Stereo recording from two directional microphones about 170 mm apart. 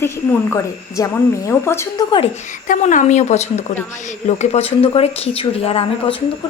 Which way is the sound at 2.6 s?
50° left (ahead or behind).